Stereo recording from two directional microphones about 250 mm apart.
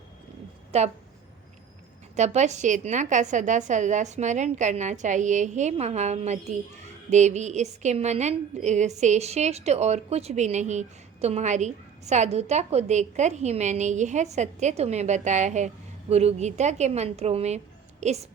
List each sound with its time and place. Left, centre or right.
0.7 s a woman's voice: right
2.1 s a woman's voice: right